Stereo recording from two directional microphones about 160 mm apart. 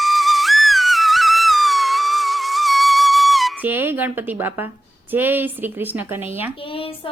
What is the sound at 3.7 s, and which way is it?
A woman's voice, 10° right (ahead or behind).